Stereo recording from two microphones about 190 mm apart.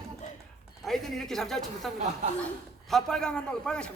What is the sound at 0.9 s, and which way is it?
A man's voice, centre (ahead or behind).